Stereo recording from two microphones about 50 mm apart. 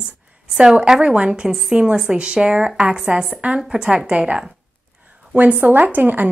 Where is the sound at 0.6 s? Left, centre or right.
Centre.